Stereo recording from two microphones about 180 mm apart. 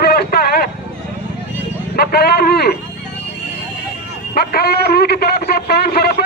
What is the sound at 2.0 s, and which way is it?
Speech, 65° left (ahead or behind).